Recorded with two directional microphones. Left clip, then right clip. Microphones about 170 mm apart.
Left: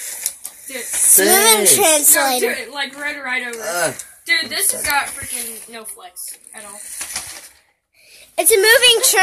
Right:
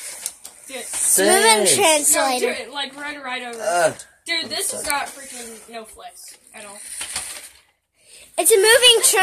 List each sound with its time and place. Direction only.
0.7 s speech: 40° right (ahead or behind)
1.3 s speech: 15° right (ahead or behind)
2.7 s a woman's voice: 45° right (ahead or behind)
7.0 s coin: centre (ahead or behind)
8.4 s a woman's voice: centre (ahead or behind)